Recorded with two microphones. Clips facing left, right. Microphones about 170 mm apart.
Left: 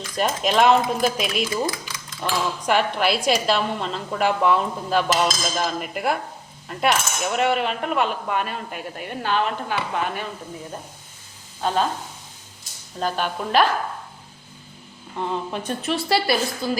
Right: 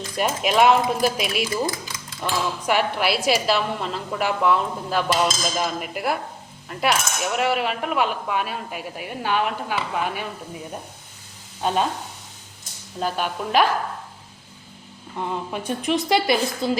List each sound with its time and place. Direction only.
0.2 s a woman's voice: 5° right (ahead or behind)
2.6 s cutlery: 5° right (ahead or behind)
11.6 s a woman's voice: 15° right (ahead or behind)
13.0 s a woman's voice: 5° right (ahead or behind)
15.2 s a woman's voice: 10° right (ahead or behind)